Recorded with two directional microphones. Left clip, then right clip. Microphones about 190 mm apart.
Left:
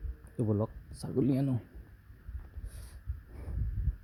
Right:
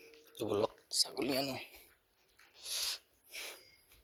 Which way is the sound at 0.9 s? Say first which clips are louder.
Left 2 dB; 25° left (ahead or behind).